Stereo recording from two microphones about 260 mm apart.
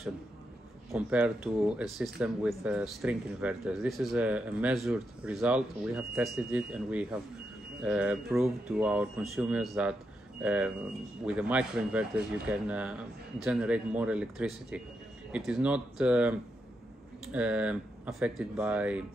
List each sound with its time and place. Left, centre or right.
0.9 s speech: centre